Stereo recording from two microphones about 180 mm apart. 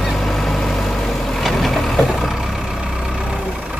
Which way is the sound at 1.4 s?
Centre (ahead or behind).